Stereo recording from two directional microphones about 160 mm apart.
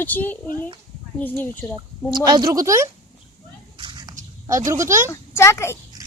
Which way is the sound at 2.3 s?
25° right (ahead or behind).